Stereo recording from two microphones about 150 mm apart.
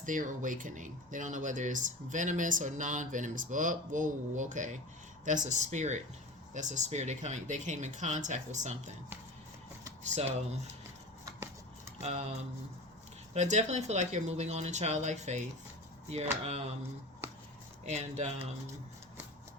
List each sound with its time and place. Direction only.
0.0 s speech: 60° right (ahead or behind)
10.0 s speech: 45° right (ahead or behind)
11.9 s speech: 45° right (ahead or behind)
17.8 s speech: 50° right (ahead or behind)